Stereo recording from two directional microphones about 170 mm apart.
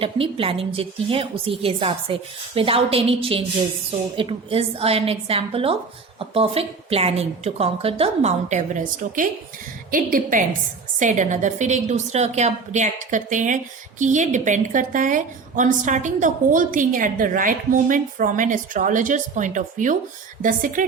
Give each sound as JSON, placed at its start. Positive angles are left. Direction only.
{"t": 0.0, "sound": "a woman's voice", "side_deg": -30}